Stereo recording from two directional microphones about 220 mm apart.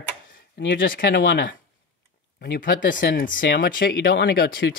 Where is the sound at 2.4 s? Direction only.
35° left (ahead or behind).